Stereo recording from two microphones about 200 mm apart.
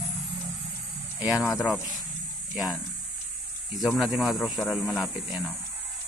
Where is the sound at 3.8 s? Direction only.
Centre (ahead or behind).